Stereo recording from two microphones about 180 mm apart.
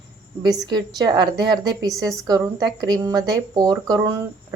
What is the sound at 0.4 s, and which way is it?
Speech, 20° right (ahead or behind).